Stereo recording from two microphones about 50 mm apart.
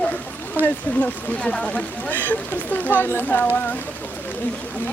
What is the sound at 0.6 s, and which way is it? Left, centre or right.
Speech, left.